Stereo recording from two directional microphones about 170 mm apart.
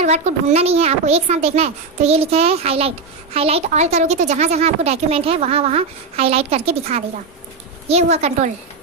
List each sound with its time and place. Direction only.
0.0 s a child's voice: 40° right (ahead or behind)